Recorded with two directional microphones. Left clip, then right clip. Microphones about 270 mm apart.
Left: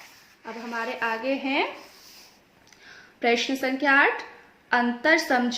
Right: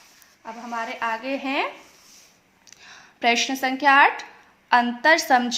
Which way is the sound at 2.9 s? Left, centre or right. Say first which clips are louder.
Right 3 dB; right.